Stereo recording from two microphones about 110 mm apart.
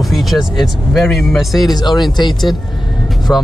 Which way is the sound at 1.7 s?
40° left (ahead or behind).